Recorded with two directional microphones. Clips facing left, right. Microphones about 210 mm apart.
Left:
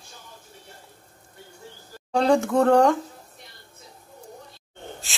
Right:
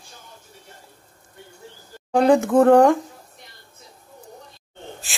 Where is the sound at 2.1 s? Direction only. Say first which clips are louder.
Right 4 dB; 15° right (ahead or behind).